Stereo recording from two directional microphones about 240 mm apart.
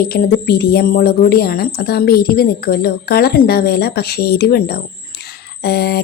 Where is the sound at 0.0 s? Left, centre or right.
Left.